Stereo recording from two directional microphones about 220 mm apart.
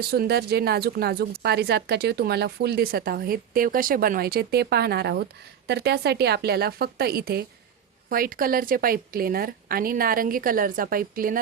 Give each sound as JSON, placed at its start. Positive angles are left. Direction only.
{"t": 0.1, "sound": "a woman's voice", "side_deg": -45}